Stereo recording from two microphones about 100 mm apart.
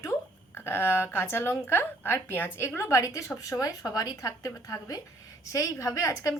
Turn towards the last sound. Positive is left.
turn(degrees=30)  # may be behind; listen again after turning